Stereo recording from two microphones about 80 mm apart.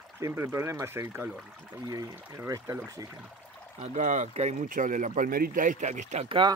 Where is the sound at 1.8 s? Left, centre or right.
Right.